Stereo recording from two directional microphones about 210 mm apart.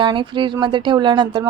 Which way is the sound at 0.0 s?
20° right (ahead or behind).